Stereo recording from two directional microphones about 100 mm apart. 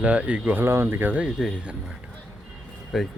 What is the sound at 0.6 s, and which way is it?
Speech, 25° right (ahead or behind).